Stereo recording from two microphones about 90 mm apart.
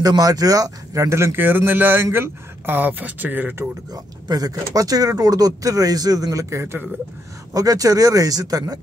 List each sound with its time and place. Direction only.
0.0 s a man's voice: 40° right (ahead or behind); by 3.6 s 20° right (ahead or behind)
3.9 s speech: 45° right (ahead or behind); by 6.9 s 30° right (ahead or behind)
7.5 s a man's voice: 40° right (ahead or behind)